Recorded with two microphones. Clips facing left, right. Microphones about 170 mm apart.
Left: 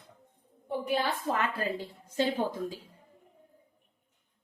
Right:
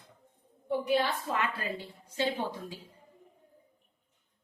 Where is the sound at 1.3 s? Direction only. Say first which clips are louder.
Left 3 dB; 45° left (ahead or behind).